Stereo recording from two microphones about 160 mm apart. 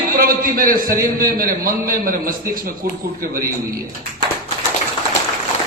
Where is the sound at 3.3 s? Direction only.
20° right (ahead or behind).